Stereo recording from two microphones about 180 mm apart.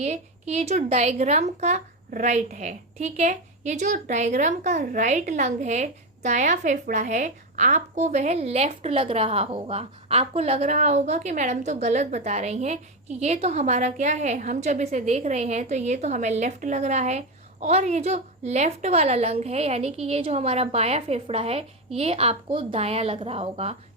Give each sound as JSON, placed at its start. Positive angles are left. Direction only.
{"t": 0.0, "sound": "a woman's voice", "side_deg": -40}